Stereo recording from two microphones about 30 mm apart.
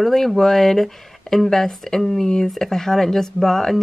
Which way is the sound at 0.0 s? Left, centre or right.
Centre.